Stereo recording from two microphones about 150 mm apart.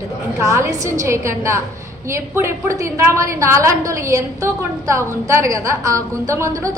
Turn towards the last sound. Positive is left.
turn(degrees=-20)  # may be behind; listen again after turning